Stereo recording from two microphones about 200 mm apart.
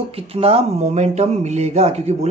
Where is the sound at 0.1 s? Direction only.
30° right (ahead or behind).